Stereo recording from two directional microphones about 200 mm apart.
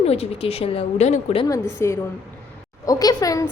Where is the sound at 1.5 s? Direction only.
15° left (ahead or behind).